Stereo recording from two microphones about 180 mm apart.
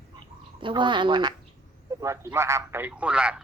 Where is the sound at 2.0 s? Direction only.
15° right (ahead or behind).